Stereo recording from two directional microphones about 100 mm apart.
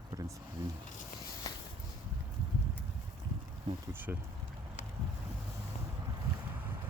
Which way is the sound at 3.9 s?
20° right (ahead or behind).